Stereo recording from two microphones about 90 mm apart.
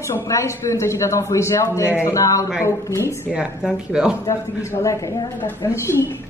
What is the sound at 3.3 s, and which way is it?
Speech, 10° right (ahead or behind).